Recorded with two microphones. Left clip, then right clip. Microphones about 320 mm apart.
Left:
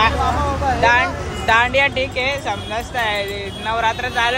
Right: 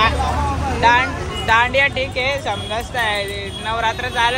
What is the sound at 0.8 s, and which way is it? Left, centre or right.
Speech, centre.